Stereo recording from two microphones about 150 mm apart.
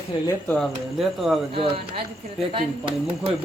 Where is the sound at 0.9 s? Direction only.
Centre (ahead or behind).